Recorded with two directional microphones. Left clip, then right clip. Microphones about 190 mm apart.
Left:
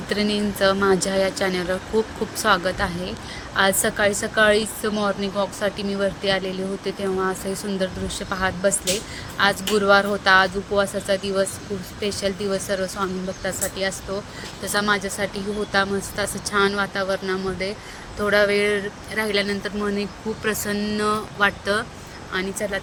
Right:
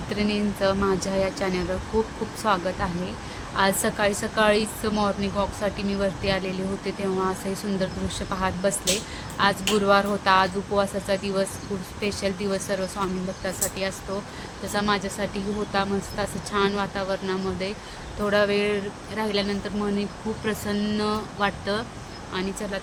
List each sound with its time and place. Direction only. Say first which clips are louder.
0.1 s speech: left 4 dB; 20° left (ahead or behind)
20.7 s speech: left 3 dB; 5° left (ahead or behind)
21.1 s speech: left 8 dB; 15° left (ahead or behind)